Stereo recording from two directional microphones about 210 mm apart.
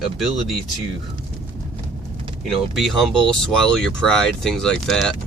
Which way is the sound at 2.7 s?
Centre (ahead or behind).